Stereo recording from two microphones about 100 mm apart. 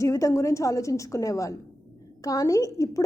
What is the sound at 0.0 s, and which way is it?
A woman's voice, 30° left (ahead or behind).